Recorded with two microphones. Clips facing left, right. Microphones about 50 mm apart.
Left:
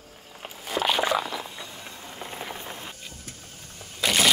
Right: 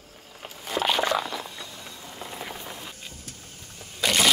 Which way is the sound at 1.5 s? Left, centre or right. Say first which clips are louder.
Left 1 dB; left.